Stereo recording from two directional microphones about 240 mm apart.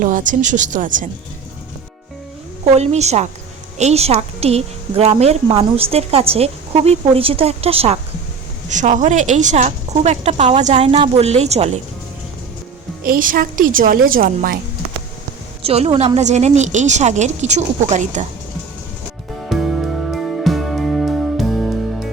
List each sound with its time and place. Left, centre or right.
0.0 s a woman's voice: right
2.7 s a woman's voice: right
13.1 s a woman's voice: right
15.6 s a woman's voice: right
19.5 s music: centre